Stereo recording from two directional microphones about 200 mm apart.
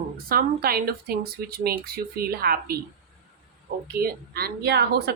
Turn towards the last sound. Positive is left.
turn(degrees=-55)  # may be behind; listen again after turning